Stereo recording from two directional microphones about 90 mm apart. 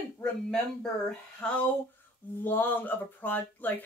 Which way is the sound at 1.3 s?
15° left (ahead or behind).